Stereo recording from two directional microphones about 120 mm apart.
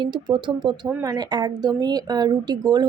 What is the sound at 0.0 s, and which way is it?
Speech, 45° right (ahead or behind).